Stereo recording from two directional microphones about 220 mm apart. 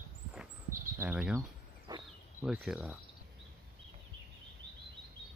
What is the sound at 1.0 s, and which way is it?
Speech, 5° right (ahead or behind).